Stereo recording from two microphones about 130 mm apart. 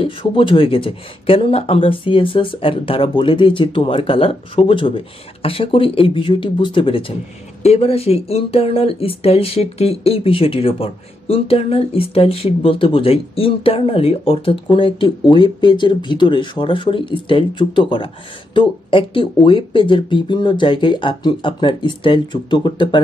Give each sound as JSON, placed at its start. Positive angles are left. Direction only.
{"t": 0.0, "sound": "speech", "side_deg": 45}